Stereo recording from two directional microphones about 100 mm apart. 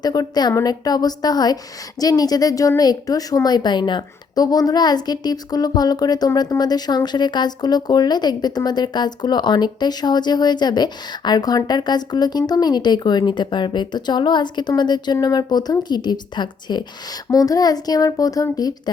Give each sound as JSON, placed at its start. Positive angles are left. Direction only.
{"t": 0.0, "sound": "speech", "side_deg": 40}
{"t": 17.3, "sound": "speech", "side_deg": 35}